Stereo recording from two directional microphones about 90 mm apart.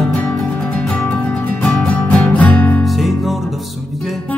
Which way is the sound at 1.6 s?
15° left (ahead or behind).